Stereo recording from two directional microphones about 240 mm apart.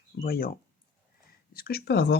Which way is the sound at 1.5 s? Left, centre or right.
Left.